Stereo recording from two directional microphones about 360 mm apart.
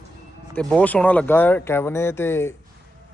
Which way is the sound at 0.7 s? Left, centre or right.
Centre.